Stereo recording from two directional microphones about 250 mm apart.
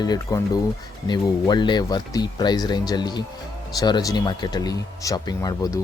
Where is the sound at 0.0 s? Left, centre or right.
Centre.